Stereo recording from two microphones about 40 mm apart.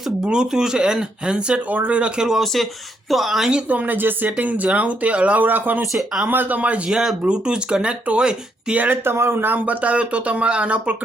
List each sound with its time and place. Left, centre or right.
0.3 s speech: centre
2.4 s speech: centre
3.7 s speech: right
3.9 s speech: right
4.4 s speech: right
5.5 s speech: right
5.9 s speech: centre
6.2 s speech: right
6.9 s speech: centre
7.3 s speech: right
8.9 s speech: right
9.5 s speech: right